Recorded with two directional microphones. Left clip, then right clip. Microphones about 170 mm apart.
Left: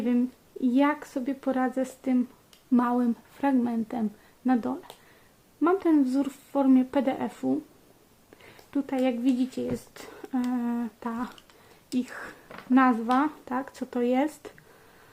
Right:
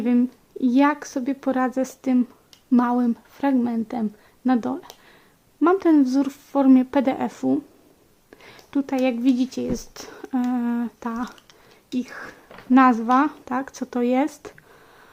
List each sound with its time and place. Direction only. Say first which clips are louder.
0.0 s a woman's voice: right 5 dB; 30° right (ahead or behind)
11.9 s speech: right 2 dB; 15° right (ahead or behind)
12.7 s a woman's voice: right 6 dB; 25° right (ahead or behind)